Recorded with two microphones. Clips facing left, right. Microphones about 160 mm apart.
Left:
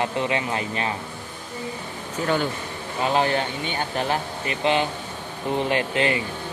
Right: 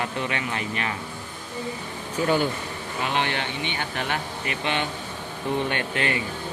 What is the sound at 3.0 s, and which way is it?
Speech, 35° left (ahead or behind).